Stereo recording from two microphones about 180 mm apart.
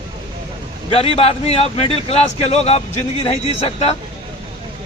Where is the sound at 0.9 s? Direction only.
35° left (ahead or behind).